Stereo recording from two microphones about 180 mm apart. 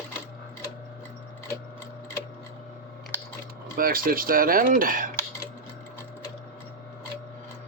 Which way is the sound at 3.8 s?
55° right (ahead or behind).